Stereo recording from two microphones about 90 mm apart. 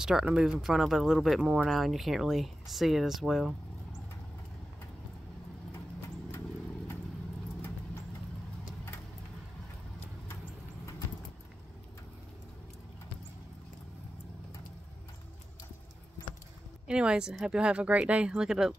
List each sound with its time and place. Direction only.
0.0 s speech: 5° right (ahead or behind)
1.7 s speech: centre (ahead or behind)
16.8 s speech: 10° right (ahead or behind)